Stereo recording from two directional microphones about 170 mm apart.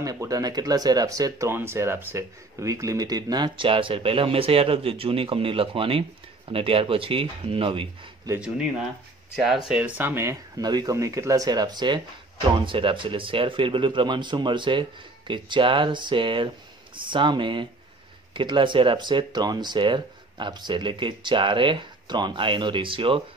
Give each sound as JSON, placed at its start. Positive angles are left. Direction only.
{"t": 0.0, "sound": "speech", "side_deg": -20}
{"t": 8.4, "sound": "speech", "side_deg": -5}